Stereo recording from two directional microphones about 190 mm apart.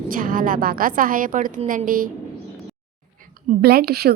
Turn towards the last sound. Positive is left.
turn(degrees=-55)  # may be behind; listen again after turning